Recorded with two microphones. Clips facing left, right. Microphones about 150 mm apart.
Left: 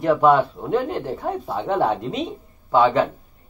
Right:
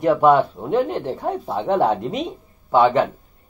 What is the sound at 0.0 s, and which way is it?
Speech, 15° right (ahead or behind).